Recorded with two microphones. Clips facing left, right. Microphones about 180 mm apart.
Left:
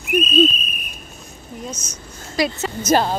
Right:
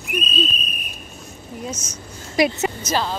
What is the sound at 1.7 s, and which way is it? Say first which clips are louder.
Speech: right 2 dB; 5° right (ahead or behind).